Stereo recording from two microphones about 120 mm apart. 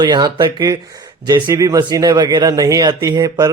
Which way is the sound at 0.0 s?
35° right (ahead or behind).